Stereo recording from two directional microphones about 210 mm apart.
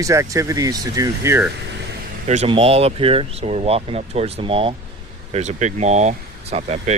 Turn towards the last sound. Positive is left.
turn(degrees=-30)  # may be behind; listen again after turning